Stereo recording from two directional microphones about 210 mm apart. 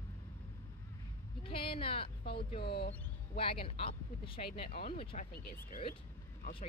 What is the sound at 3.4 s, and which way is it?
Speech, 25° left (ahead or behind).